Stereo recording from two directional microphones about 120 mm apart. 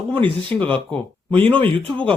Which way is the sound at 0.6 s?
10° left (ahead or behind).